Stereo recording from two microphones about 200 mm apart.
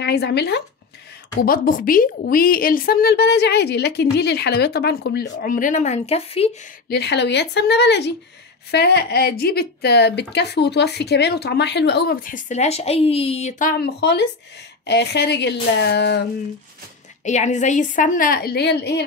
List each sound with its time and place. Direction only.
0.0 s speech: 55° left (ahead or behind)
1.4 s a woman's voice: 45° left (ahead or behind)
5.3 s a woman's voice: 40° left (ahead or behind)
6.9 s speech: 55° left (ahead or behind)
17.2 s a woman's voice: 35° left (ahead or behind); by 19.0 s 55° left (ahead or behind)